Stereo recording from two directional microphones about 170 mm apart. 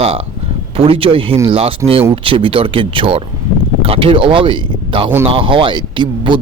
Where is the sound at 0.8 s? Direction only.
35° right (ahead or behind).